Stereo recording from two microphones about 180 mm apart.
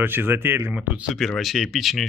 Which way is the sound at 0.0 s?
10° right (ahead or behind).